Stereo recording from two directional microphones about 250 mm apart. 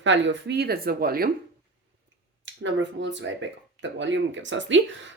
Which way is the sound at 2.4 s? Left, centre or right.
Right.